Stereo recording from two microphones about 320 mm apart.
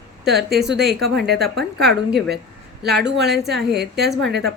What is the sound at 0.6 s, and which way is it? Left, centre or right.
Speech, right.